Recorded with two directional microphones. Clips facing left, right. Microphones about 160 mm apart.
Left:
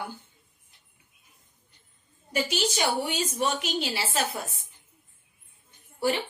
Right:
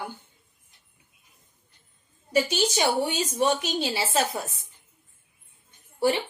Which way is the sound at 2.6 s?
25° right (ahead or behind).